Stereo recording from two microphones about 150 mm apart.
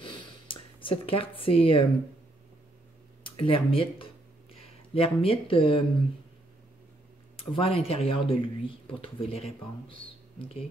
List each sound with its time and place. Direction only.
0.0 s a sound: 35° left (ahead or behind)
3.3 s speech: 35° left (ahead or behind)
7.3 s speech: 40° left (ahead or behind)